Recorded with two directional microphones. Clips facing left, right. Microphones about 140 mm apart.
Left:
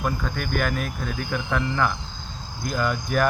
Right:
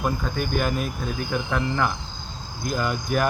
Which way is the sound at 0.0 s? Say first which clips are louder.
Right 2 dB; 20° right (ahead or behind).